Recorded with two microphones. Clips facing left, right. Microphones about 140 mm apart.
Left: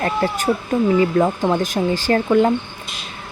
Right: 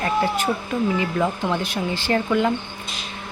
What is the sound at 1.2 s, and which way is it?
Speech, 35° left (ahead or behind).